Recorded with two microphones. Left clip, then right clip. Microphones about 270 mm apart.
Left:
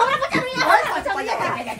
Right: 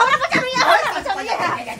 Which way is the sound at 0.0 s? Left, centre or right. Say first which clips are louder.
Right 3 dB; centre.